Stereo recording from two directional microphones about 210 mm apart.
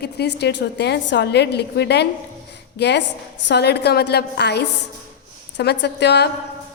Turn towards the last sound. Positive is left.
turn(degrees=55)  # may be behind; listen again after turning